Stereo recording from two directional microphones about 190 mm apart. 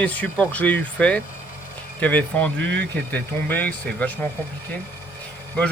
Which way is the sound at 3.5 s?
10° left (ahead or behind).